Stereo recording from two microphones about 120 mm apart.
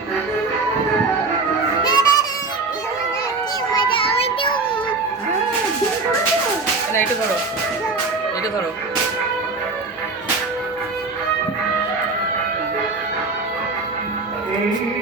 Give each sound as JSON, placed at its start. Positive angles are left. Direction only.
{"t": 1.8, "sound": "music", "side_deg": 35}
{"t": 3.8, "sound": "music", "side_deg": 50}